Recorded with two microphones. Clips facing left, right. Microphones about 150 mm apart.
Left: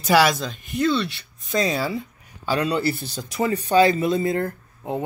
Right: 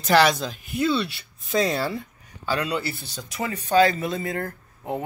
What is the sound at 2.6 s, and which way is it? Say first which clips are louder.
Speech: left 5 dB; 35° left (ahead or behind).